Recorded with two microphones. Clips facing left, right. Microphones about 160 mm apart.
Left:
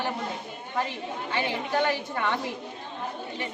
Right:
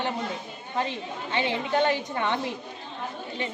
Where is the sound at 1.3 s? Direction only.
20° right (ahead or behind).